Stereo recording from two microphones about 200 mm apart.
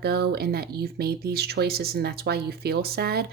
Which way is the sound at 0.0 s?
55° right (ahead or behind).